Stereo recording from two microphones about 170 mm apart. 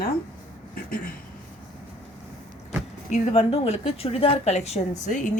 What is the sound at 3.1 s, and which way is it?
A woman's voice, 35° left (ahead or behind).